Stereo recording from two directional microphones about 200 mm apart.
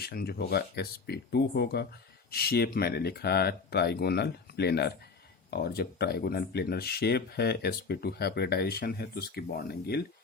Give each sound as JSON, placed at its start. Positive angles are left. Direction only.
{"t": 0.0, "sound": "speech", "side_deg": 50}